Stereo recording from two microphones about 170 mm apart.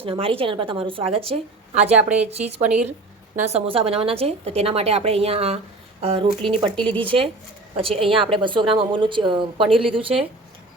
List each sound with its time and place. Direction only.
0.0 s a woman's voice: 35° right (ahead or behind)
2.0 s speech: 5° right (ahead or behind)
3.3 s a woman's voice: 40° right (ahead or behind)